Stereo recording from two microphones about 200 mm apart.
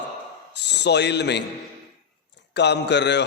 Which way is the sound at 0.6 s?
60° left (ahead or behind).